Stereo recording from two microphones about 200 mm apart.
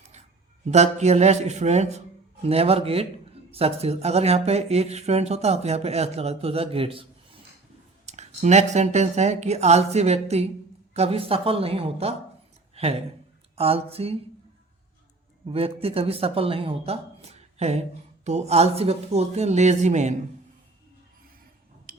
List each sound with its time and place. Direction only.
0.7 s a man's voice: 35° right (ahead or behind)
15.4 s a man's voice: 30° right (ahead or behind)
21.9 s a sound: 45° right (ahead or behind)